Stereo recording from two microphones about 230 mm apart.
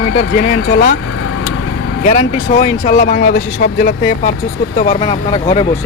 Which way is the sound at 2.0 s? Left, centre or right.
Left.